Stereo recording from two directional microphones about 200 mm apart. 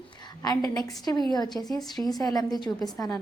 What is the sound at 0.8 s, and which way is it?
Speech, 20° left (ahead or behind).